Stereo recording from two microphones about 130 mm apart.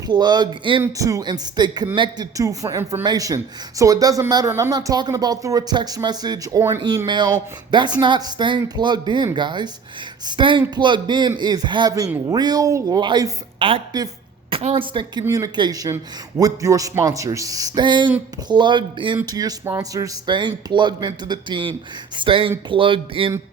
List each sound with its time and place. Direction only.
0.1 s speech: 35° right (ahead or behind)
0.8 s a man's voice: 25° right (ahead or behind); by 15.2 s 40° right (ahead or behind)
15.2 s a man's voice: 25° right (ahead or behind); by 23.3 s 45° right (ahead or behind)